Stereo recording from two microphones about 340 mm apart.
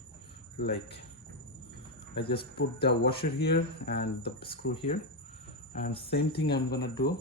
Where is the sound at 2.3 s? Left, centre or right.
Left.